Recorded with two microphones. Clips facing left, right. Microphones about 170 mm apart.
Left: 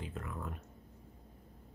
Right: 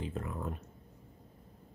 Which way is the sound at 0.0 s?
25° right (ahead or behind).